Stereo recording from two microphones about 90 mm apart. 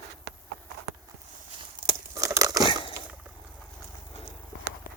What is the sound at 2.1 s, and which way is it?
Crumpling, 40° right (ahead or behind).